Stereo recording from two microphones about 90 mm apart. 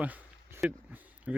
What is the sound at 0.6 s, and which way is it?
Speech, 5° right (ahead or behind).